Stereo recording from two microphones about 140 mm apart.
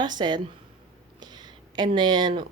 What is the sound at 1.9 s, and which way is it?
Speech, 30° right (ahead or behind).